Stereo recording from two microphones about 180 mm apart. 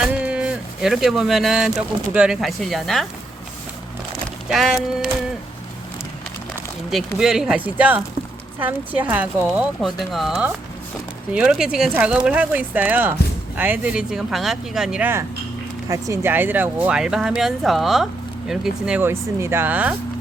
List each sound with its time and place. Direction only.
0.0 s speech: 5° right (ahead or behind)
4.4 s speech: centre (ahead or behind)
6.9 s speech: 5° right (ahead or behind)